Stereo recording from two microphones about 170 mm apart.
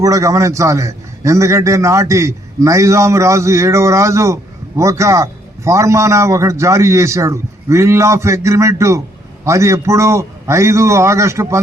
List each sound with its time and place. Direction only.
0.0 s a man's voice: 20° right (ahead or behind)